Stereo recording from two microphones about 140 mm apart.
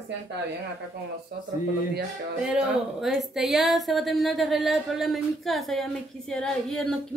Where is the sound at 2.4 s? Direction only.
10° right (ahead or behind).